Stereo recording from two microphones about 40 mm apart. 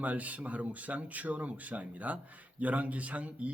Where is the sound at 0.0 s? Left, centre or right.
Right.